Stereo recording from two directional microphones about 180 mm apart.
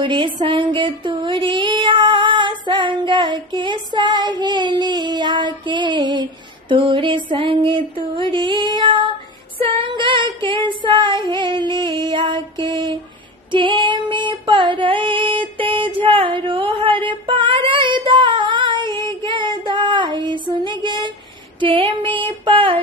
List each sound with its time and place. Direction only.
0.0 s female singing: 25° right (ahead or behind)
6.7 s a sound: 30° right (ahead or behind)
9.6 s child singing: 30° right (ahead or behind)
13.5 s female singing: 25° right (ahead or behind)
21.5 s a sound: 30° right (ahead or behind)
22.4 s female singing: 30° right (ahead or behind)